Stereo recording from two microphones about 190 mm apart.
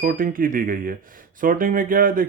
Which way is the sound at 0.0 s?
50° right (ahead or behind).